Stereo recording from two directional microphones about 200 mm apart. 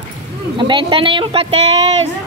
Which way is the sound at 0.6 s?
25° right (ahead or behind).